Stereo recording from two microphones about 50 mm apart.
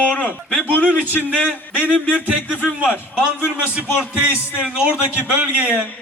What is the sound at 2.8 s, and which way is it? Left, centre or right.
Speech, right.